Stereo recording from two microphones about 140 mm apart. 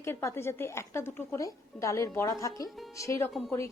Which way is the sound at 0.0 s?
20° left (ahead or behind).